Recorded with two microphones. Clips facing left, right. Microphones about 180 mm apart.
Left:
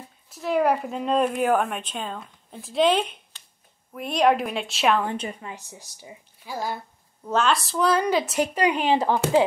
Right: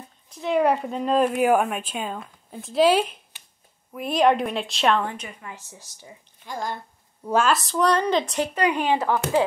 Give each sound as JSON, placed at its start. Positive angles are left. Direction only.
{"t": 0.3, "sound": "speech", "side_deg": 0}
{"t": 5.0, "sound": "a woman's voice", "side_deg": 30}
{"t": 5.5, "sound": "a woman's voice", "side_deg": 15}
{"t": 7.2, "sound": "speech", "side_deg": -5}
{"t": 8.7, "sound": "a woman's voice", "side_deg": 25}